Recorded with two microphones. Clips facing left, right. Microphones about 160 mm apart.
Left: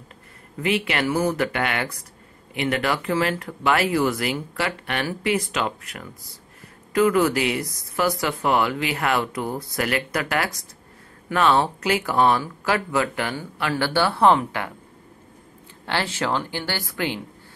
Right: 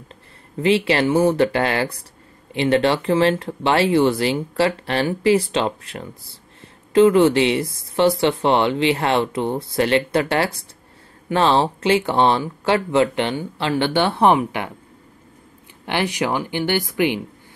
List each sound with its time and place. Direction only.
0.6 s speech: 30° right (ahead or behind)
15.8 s speech: 15° right (ahead or behind)